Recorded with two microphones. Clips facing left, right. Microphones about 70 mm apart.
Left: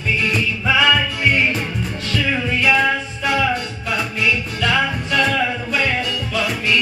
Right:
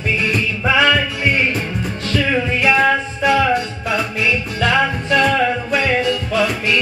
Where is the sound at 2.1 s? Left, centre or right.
Right.